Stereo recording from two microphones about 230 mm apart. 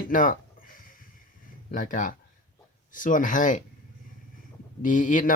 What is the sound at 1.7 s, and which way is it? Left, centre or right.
Speech, left.